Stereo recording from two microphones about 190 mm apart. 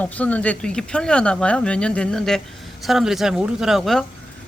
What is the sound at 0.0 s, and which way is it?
Speech, 10° left (ahead or behind).